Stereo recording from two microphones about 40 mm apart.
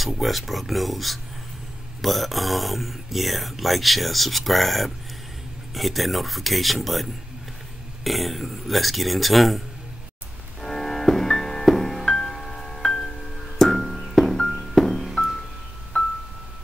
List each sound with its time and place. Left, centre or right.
0.0 s speech: centre
10.6 s music: centre
15.9 s music: left